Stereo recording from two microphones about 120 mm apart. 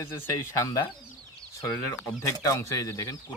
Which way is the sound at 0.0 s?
25° left (ahead or behind).